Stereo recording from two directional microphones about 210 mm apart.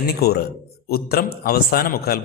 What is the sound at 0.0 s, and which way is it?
A man's voice, 45° left (ahead or behind).